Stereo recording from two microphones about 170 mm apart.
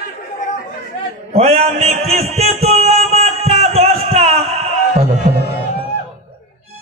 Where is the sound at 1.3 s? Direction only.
40° right (ahead or behind).